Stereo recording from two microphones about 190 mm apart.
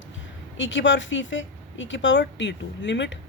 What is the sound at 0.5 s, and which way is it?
Speech, 75° left (ahead or behind).